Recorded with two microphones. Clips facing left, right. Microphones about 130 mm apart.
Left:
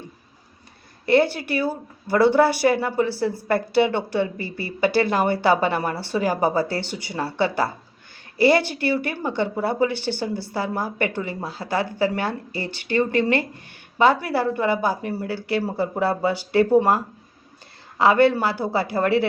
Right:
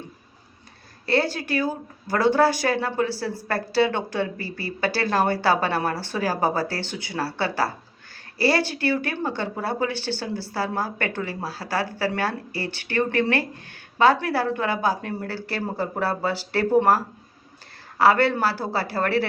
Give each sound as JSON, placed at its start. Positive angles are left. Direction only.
{"t": 1.0, "sound": "speech", "side_deg": 20}
{"t": 17.9, "sound": "speech", "side_deg": 20}